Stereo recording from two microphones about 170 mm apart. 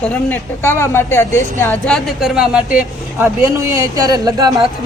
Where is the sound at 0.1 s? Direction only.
15° left (ahead or behind).